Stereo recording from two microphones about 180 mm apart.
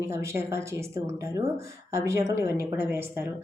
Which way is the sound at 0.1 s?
15° right (ahead or behind).